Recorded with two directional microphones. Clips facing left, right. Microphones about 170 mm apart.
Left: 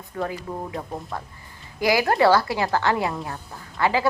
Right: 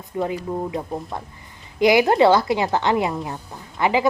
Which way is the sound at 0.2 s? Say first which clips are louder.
Right 5 dB; 20° right (ahead or behind).